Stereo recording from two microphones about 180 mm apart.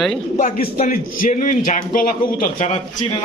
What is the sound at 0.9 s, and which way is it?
A man's voice, 50° left (ahead or behind).